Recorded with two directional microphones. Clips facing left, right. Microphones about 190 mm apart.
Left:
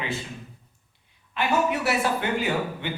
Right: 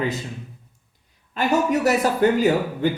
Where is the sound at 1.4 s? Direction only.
40° right (ahead or behind).